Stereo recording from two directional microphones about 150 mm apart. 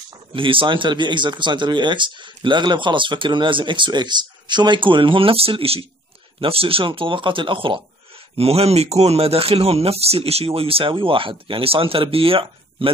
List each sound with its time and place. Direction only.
0.3 s speech: 35° right (ahead or behind)